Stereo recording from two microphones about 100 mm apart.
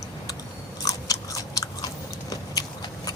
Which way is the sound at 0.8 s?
35° left (ahead or behind).